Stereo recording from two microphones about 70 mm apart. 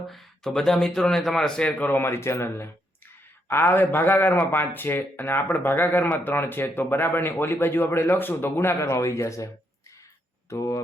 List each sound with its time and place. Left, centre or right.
0.0 s speech: centre
2.0 s speech: left
10.5 s speech: left